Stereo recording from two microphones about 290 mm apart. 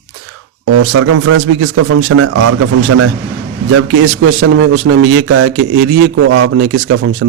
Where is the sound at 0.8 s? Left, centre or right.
Right.